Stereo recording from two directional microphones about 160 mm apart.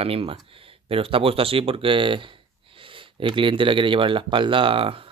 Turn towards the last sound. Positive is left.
turn(degrees=-35)  # may be behind; listen again after turning